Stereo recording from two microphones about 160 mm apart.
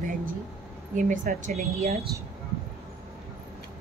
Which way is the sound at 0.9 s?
55° right (ahead or behind).